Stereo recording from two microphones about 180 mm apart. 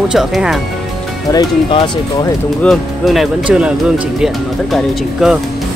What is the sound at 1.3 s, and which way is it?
Speech, 20° left (ahead or behind).